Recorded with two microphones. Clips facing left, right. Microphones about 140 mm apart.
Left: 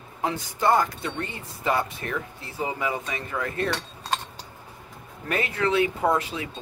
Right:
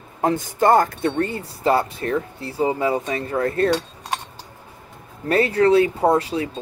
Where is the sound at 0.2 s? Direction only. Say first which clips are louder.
Right 7 dB; 45° right (ahead or behind).